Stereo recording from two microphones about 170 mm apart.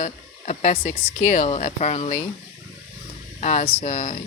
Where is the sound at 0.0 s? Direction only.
45° left (ahead or behind).